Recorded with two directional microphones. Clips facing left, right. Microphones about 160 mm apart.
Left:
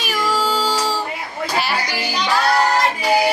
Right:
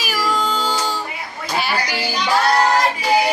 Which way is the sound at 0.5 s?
35° left (ahead or behind).